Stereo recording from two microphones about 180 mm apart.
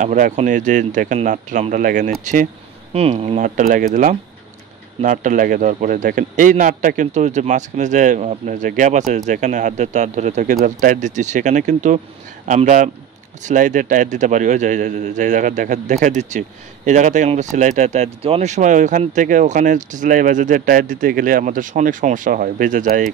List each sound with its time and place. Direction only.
0.0 s a man's voice: 45° right (ahead or behind)
2.9 s a man's voice: 35° right (ahead or behind)